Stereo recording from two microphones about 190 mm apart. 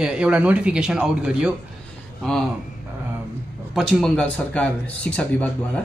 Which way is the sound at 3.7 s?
5° left (ahead or behind).